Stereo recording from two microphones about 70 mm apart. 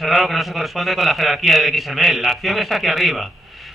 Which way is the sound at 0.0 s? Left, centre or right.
Centre.